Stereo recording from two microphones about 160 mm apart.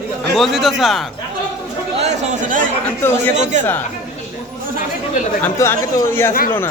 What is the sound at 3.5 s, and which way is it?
Speech, 50° right (ahead or behind).